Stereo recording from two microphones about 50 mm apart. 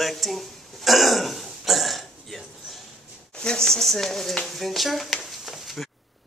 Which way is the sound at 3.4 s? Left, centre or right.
Centre.